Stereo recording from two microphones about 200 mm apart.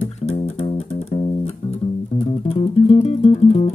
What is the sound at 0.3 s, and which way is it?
Music, 30° left (ahead or behind).